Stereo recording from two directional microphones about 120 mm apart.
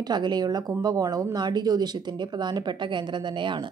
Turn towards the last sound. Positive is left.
turn(degrees=-40)  # may be behind; listen again after turning